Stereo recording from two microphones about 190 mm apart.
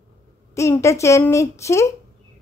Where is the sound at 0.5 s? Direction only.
15° left (ahead or behind).